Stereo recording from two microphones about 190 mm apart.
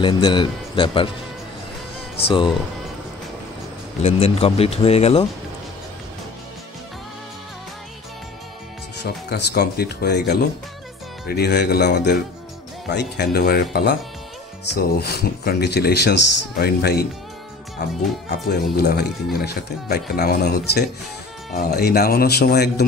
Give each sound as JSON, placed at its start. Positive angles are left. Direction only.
{"t": 0.0, "sound": "a man's voice", "side_deg": 25}
{"t": 4.0, "sound": "speech", "side_deg": 35}
{"t": 9.0, "sound": "speech", "side_deg": 60}